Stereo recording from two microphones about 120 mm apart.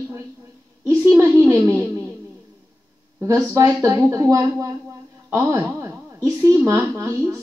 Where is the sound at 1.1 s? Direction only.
25° right (ahead or behind).